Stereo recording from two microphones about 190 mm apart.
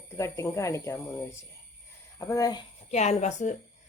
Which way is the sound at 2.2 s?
20° left (ahead or behind).